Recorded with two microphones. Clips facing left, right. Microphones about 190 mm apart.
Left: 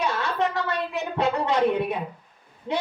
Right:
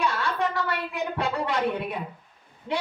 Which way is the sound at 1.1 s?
20° left (ahead or behind).